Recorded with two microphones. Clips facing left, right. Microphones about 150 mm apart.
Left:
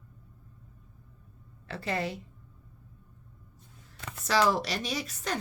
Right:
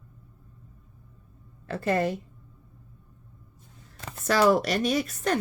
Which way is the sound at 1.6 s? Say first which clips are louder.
Right 7 dB; 50° right (ahead or behind).